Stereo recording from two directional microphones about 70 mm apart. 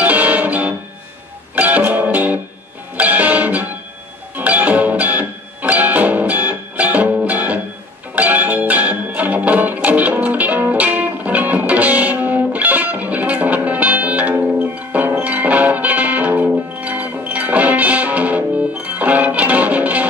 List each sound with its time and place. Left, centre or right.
0.0 s music: right